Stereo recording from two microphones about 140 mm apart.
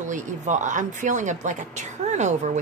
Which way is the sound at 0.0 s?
60° right (ahead or behind).